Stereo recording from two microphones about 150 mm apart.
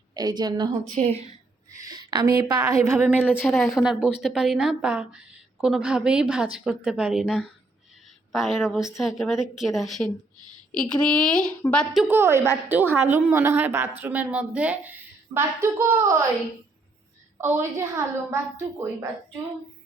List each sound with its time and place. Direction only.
0.1 s a woman's voice: 25° right (ahead or behind)
0.9 s a woman's voice: 45° right (ahead or behind)
1.7 s a woman's voice: 25° right (ahead or behind)
3.1 s a woman's voice: 10° left (ahead or behind)
12.0 s a woman's voice: 15° right (ahead or behind)
17.3 s a woman's voice: 15° right (ahead or behind)